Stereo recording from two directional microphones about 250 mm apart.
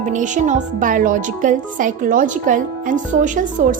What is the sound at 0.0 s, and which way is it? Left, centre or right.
Speech, right.